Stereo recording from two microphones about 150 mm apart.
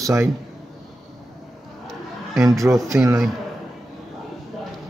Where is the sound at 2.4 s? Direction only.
20° right (ahead or behind).